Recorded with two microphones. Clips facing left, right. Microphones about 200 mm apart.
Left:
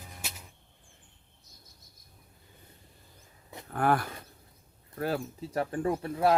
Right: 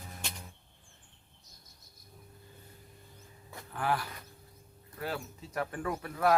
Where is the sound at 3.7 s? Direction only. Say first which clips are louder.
Left 6 dB; 50° left (ahead or behind).